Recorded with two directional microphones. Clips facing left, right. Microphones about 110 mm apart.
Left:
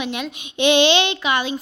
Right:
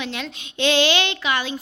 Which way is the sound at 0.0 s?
15° left (ahead or behind).